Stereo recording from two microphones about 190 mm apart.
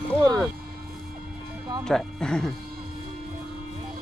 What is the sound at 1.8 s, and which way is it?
Speech, 5° left (ahead or behind).